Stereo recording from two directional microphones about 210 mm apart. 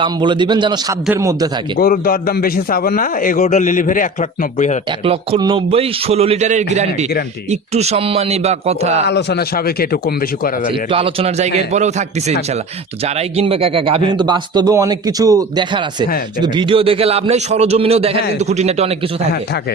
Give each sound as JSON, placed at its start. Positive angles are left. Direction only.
{"t": 0.0, "sound": "a man's voice", "side_deg": -20}
{"t": 1.8, "sound": "a man's voice", "side_deg": 45}
{"t": 5.0, "sound": "a man's voice", "side_deg": -25}
{"t": 9.0, "sound": "a man's voice", "side_deg": 55}
{"t": 10.9, "sound": "a man's voice", "side_deg": -25}
{"t": 13.1, "sound": "a man's voice", "side_deg": -30}